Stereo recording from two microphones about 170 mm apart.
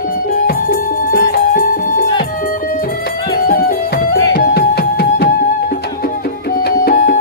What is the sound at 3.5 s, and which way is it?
Music, 65° left (ahead or behind).